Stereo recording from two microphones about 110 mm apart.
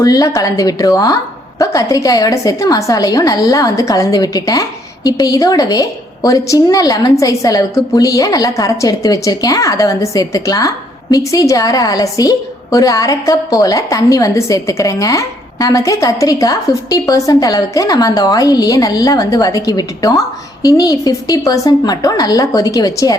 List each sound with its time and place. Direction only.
0.0 s a woman's voice: 30° left (ahead or behind)